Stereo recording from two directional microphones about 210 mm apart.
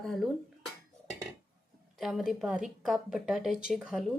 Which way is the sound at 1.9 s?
Centre (ahead or behind).